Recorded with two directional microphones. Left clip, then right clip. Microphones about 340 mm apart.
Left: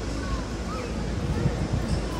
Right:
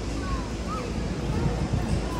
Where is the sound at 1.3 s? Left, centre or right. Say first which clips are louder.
Even; centre.